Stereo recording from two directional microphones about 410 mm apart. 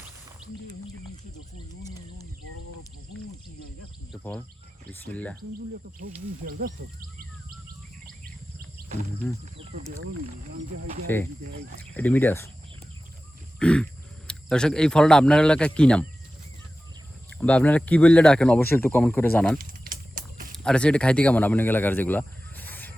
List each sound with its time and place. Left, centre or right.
4.1 s speech: centre
6.1 s speech: right
8.0 s chirp: right
9.6 s speech: right
11.0 s speech: centre
13.6 s grunt: centre
14.3 s speech: centre
17.2 s speech: centre
19.5 s vehicle: right
20.7 s speech: centre